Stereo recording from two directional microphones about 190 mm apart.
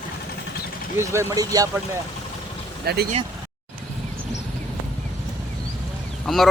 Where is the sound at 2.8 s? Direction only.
55° right (ahead or behind).